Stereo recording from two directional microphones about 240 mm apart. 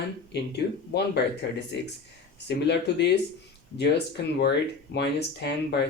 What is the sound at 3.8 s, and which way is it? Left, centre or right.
Speech, left.